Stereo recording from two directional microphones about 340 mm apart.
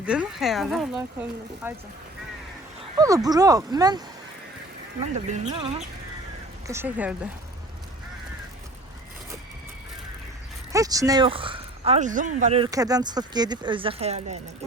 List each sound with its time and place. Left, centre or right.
0.0 s speech: centre
3.0 s speech: centre
5.3 s speech: centre
10.7 s speech: centre